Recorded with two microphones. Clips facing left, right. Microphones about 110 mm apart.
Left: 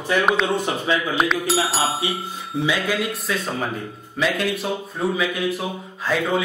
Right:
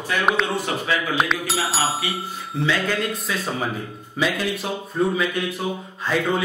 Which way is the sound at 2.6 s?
10° left (ahead or behind).